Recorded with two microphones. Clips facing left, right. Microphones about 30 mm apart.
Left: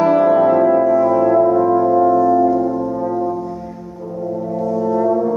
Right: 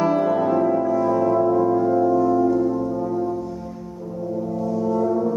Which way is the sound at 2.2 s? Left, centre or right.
Centre.